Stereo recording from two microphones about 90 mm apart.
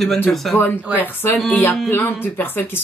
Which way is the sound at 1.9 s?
25° left (ahead or behind).